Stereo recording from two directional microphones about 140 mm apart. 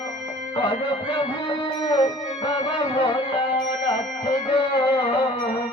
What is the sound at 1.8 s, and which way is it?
Music, 35° left (ahead or behind).